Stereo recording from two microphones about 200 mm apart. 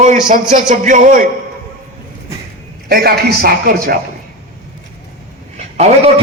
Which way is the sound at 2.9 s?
50° right (ahead or behind).